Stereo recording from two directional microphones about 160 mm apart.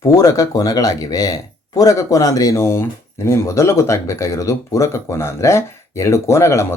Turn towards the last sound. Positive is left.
turn(degrees=15)  # may be behind; listen again after turning